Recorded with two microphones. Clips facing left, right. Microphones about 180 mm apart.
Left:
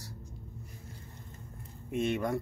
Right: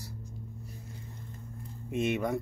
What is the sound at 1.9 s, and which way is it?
Speech, 20° right (ahead or behind).